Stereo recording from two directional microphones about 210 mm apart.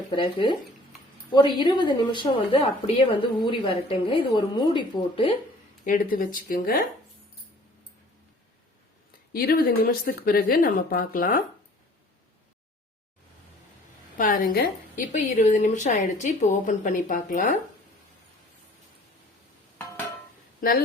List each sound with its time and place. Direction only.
0.1 s a woman's voice: 25° left (ahead or behind)
5.8 s a woman's voice: 40° left (ahead or behind)
9.3 s speech: 45° left (ahead or behind)
14.2 s a woman's voice: 40° left (ahead or behind)